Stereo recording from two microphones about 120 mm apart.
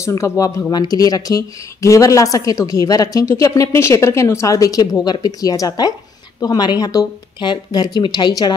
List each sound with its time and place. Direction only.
0.0 s speech: 25° left (ahead or behind)